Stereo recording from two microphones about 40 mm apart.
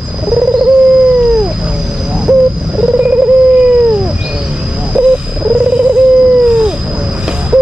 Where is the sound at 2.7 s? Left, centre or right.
Right.